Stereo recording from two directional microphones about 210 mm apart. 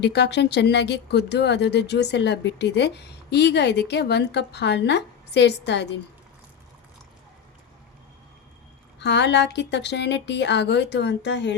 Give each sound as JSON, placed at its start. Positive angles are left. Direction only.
{"t": 0.0, "sound": "speech", "side_deg": 55}
{"t": 9.0, "sound": "a woman's voice", "side_deg": 55}